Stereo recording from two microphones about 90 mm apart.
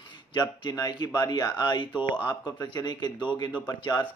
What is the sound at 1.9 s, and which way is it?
Speech, 20° right (ahead or behind).